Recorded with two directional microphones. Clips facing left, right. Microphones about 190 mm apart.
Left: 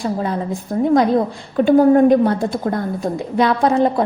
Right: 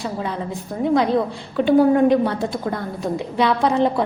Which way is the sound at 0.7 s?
45° left (ahead or behind).